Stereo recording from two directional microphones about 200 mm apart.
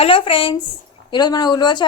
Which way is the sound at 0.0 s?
25° left (ahead or behind).